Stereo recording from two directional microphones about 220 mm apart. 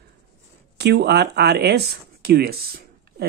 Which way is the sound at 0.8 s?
50° right (ahead or behind).